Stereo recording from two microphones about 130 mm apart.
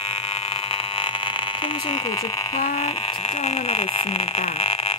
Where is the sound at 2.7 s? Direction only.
45° left (ahead or behind).